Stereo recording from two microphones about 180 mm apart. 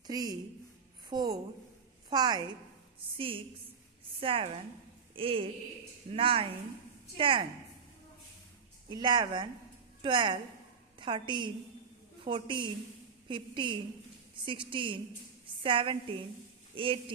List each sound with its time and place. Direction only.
0.0 s a woman's voice: 20° right (ahead or behind)
8.8 s a woman's voice: 25° right (ahead or behind)